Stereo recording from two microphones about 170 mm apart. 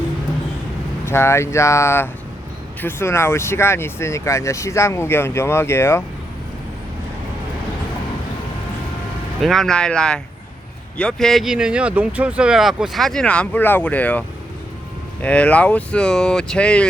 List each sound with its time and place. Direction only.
1.0 s speech: 15° left (ahead or behind)
9.4 s speech: centre (ahead or behind)